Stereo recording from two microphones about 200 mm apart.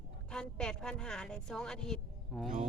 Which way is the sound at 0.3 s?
5° left (ahead or behind).